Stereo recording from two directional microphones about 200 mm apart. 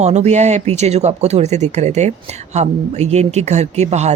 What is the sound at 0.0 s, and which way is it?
Speech, 35° right (ahead or behind).